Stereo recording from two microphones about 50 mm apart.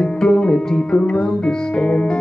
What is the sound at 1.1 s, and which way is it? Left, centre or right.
Speech, centre.